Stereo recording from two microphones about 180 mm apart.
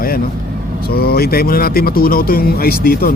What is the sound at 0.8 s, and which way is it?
Speech, 60° left (ahead or behind).